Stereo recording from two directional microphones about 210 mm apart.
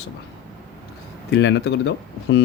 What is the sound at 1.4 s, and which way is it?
Speech, 60° left (ahead or behind).